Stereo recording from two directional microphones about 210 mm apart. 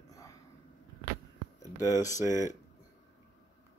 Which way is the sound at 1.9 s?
15° left (ahead or behind).